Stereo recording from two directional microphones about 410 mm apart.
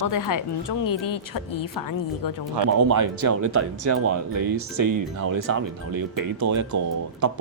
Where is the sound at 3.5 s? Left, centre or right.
Right.